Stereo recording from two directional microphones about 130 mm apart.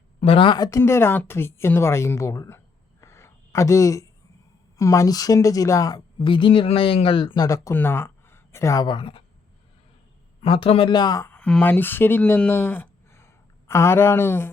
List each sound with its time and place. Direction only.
0.2 s speech: 45° left (ahead or behind)
0.8 s a woman's voice: 20° left (ahead or behind)
3.0 s a sound: 20° left (ahead or behind)
4.8 s a woman's voice: 25° left (ahead or behind)
6.1 s speech: 40° left (ahead or behind); by 8.9 s 25° left (ahead or behind)
8.9 s speech: 40° left (ahead or behind)
10.4 s speech: 45° left (ahead or behind); by 11.3 s 30° left (ahead or behind)
11.3 s speech: 10° left (ahead or behind)